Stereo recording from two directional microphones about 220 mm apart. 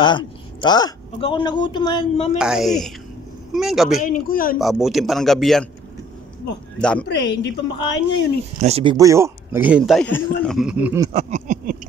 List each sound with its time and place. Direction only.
0.0 s speech: 20° left (ahead or behind)
2.3 s speech: 5° right (ahead or behind)
4.0 s speech: 40° left (ahead or behind)
4.6 s speech: centre (ahead or behind)
6.8 s speech: 5° left (ahead or behind)
7.1 s a woman's voice: 55° left (ahead or behind)
8.5 s speech: 30° right (ahead or behind)
8.9 s speech: 15° right (ahead or behind)
11.1 s a sound: 30° right (ahead or behind)